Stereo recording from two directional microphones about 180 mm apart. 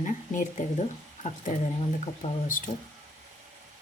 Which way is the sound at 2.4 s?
50° left (ahead or behind).